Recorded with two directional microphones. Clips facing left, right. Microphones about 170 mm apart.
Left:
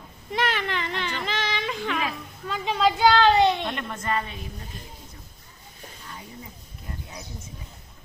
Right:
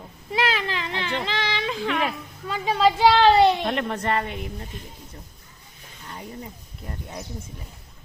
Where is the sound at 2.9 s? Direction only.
5° right (ahead or behind).